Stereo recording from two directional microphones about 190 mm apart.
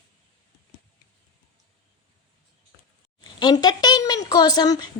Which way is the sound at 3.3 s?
20° left (ahead or behind).